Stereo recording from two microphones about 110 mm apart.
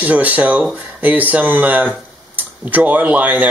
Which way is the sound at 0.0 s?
15° right (ahead or behind).